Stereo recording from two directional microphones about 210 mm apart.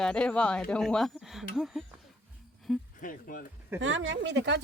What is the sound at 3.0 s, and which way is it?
Speech, 40° left (ahead or behind).